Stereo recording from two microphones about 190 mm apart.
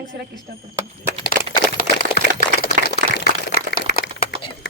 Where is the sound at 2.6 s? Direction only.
50° left (ahead or behind).